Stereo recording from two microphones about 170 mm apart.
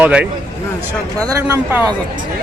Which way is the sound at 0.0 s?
5° right (ahead or behind).